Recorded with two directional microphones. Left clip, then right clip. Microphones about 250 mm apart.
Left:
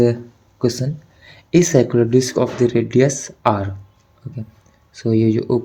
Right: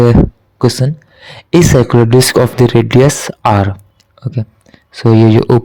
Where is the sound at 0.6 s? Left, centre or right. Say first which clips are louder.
Right 7 dB; right.